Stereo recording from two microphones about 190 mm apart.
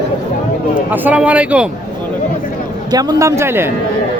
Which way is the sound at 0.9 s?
10° right (ahead or behind).